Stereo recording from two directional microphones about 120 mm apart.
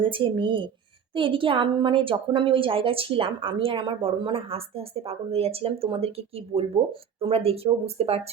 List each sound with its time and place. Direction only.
0.0 s a woman's voice: 45° right (ahead or behind)